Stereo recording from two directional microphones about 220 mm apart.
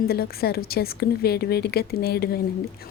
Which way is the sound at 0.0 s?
45° left (ahead or behind).